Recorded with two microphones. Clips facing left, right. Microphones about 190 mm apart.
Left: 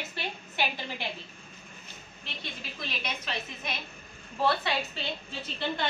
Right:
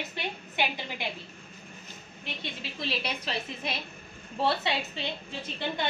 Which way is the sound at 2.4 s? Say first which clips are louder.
Right 3 dB; 30° right (ahead or behind).